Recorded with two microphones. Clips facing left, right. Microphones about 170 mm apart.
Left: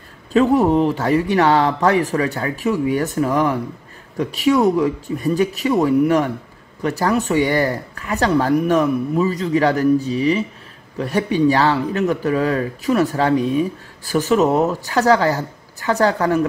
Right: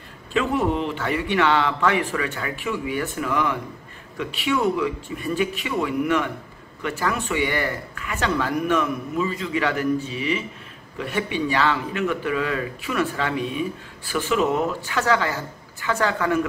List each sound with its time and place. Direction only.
0.3 s speech: 40° left (ahead or behind)